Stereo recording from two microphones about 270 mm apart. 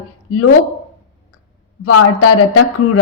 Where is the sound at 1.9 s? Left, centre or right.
Left.